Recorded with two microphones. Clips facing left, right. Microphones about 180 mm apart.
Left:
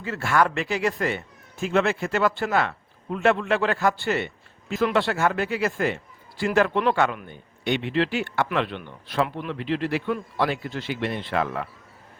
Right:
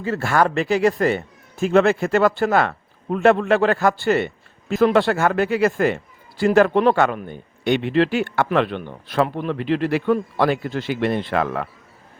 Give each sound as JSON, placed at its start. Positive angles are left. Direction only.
{"t": 0.0, "sound": "speech", "side_deg": -35}